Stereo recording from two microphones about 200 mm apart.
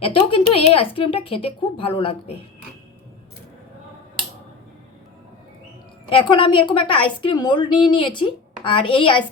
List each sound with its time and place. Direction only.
0.0 s a woman's voice: 25° left (ahead or behind)
6.1 s a woman's voice: 25° left (ahead or behind)